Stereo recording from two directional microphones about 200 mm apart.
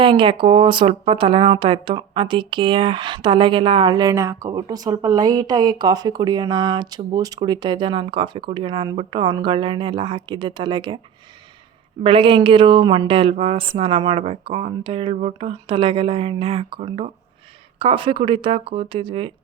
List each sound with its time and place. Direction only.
0.0 s speech: 25° right (ahead or behind)
12.0 s speech: 25° right (ahead or behind)